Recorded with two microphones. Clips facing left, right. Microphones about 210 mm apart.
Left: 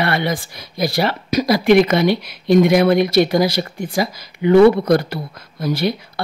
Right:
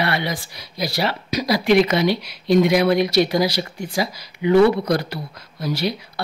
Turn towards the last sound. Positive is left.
turn(degrees=50)  # may be behind; listen again after turning